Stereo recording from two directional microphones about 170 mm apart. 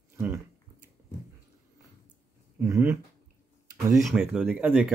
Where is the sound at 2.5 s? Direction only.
15° right (ahead or behind).